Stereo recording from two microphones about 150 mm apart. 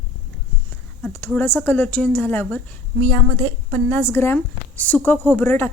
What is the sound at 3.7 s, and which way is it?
A woman's voice, 15° left (ahead or behind).